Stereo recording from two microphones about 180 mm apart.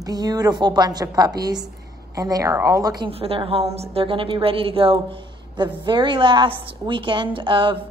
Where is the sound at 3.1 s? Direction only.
30° right (ahead or behind).